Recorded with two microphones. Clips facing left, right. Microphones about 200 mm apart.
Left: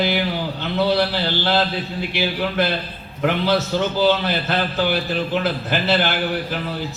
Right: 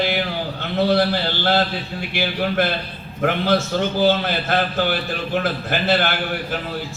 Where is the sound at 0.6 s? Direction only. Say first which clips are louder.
Right 1 dB; 50° right (ahead or behind).